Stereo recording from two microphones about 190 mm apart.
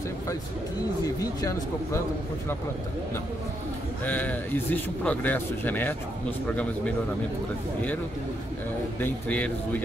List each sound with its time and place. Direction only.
1.2 s speech: 20° left (ahead or behind)
4.0 s speech: 10° left (ahead or behind)
9.0 s speech: 10° left (ahead or behind)